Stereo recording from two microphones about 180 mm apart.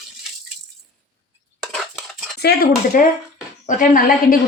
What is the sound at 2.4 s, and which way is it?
A woman's voice, 60° left (ahead or behind).